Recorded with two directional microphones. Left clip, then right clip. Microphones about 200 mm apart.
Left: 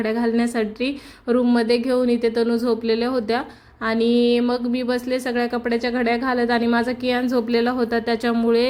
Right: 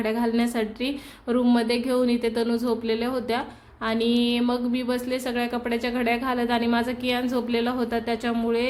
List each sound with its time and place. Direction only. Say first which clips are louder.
0.0 s a woman's voice: left 3 dB; 15° left (ahead or behind)